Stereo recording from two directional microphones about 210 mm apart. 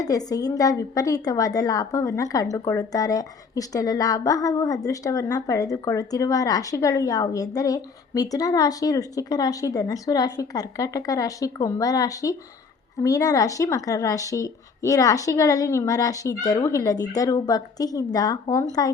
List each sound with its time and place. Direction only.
0.0 s a woman's voice: 15° left (ahead or behind)